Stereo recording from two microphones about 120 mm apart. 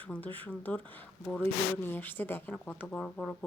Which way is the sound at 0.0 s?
15° left (ahead or behind).